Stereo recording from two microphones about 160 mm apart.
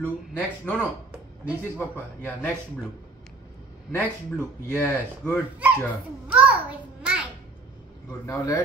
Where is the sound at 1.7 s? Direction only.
10° left (ahead or behind).